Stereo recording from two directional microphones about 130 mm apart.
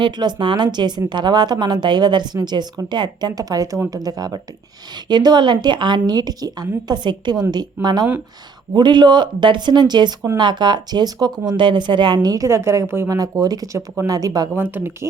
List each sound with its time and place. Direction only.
0.0 s speech: 35° right (ahead or behind)
14.5 s speech: 15° right (ahead or behind)